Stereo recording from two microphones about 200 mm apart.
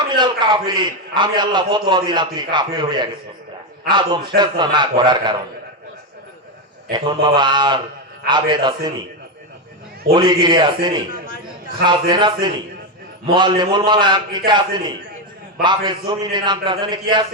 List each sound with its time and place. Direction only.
0.2 s a man's voice: 20° right (ahead or behind)
6.9 s a man's voice: 20° right (ahead or behind)
10.2 s a man's voice: 20° right (ahead or behind)